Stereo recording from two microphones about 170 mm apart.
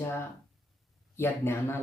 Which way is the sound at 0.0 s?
15° left (ahead or behind).